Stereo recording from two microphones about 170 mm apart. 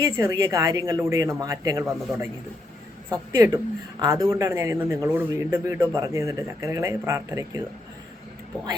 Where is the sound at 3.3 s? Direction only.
20° right (ahead or behind).